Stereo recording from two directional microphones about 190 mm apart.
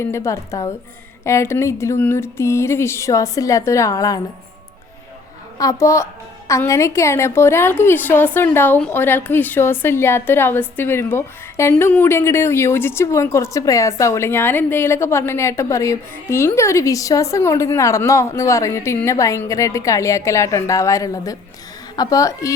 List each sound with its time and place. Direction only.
0.0 s a woman's voice: 15° left (ahead or behind)
5.5 s a woman's voice: 15° left (ahead or behind)